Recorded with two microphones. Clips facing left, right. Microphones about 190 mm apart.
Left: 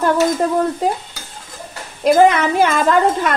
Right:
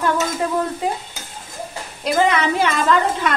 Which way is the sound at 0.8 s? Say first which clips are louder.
Left 4 dB; 40° left (ahead or behind).